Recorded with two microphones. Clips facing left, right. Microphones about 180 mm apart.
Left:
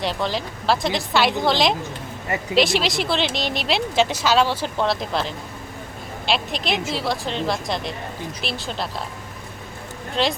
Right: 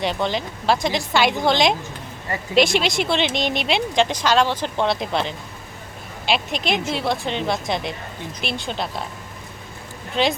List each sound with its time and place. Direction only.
0.0 s a woman's voice: centre (ahead or behind)
10.2 s a woman's voice: centre (ahead or behind)